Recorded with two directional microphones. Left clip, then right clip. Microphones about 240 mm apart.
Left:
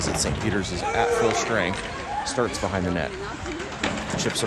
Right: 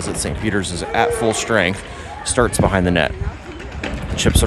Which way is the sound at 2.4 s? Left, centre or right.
Right.